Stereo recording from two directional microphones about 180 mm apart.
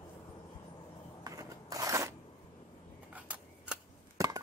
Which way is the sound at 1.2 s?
20° right (ahead or behind).